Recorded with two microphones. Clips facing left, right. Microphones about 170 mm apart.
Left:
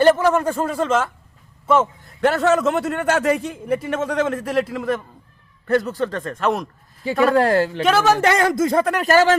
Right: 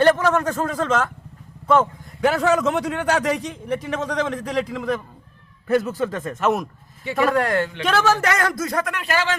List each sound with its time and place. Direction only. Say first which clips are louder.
0.0 s a man's voice: left 2 dB; 10° left (ahead or behind)
7.3 s speech: left 4 dB; 30° left (ahead or behind)
7.9 s a man's voice: left 3 dB; 15° left (ahead or behind); by 9.3 s 40° left (ahead or behind)